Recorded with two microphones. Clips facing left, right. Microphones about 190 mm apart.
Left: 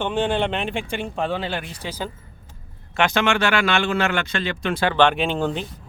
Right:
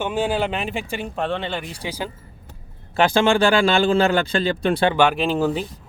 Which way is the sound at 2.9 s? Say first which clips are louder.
Right 4 dB; 30° right (ahead or behind).